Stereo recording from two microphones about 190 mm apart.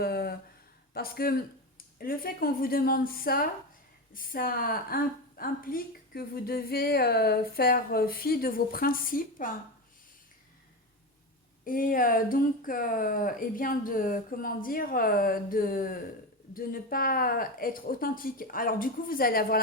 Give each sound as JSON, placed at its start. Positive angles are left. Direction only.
{"t": 0.0, "sound": "a sound", "side_deg": 55}
{"t": 0.9, "sound": "speech", "side_deg": 55}
{"t": 11.6, "sound": "speech", "side_deg": 45}